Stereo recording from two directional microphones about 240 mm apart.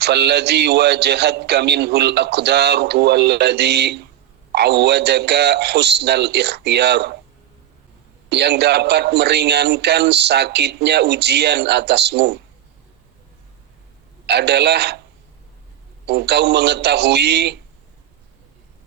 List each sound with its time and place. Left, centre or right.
0.0 s a man's voice: right
8.3 s a man's voice: right
14.3 s a man's voice: right
16.0 s a man's voice: right